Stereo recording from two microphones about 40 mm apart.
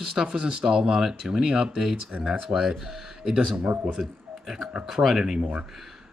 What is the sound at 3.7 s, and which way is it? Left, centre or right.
Speech, right.